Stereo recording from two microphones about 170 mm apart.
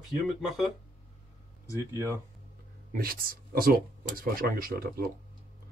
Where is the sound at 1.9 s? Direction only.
15° right (ahead or behind).